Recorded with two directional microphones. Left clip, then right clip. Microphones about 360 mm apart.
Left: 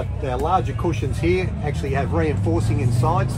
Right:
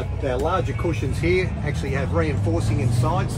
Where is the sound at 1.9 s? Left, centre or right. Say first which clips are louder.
Left 2 dB; left.